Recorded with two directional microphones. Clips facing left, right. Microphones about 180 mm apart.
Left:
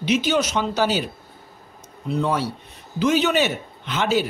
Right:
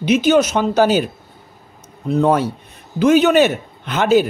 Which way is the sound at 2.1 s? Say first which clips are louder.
Right 7 dB; 50° right (ahead or behind).